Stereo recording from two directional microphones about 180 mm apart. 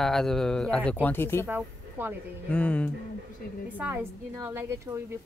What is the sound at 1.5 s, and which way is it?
Speech, 10° right (ahead or behind).